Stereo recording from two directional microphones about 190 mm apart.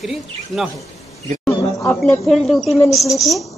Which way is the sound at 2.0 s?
Centre (ahead or behind).